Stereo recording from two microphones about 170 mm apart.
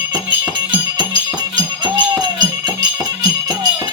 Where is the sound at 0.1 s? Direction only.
25° right (ahead or behind).